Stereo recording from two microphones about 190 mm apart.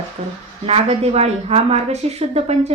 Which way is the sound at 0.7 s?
35° right (ahead or behind).